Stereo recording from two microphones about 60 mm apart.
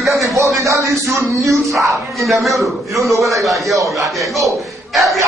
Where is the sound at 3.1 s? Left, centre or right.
Right.